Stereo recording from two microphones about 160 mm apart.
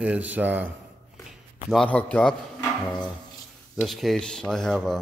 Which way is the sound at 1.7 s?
5° left (ahead or behind).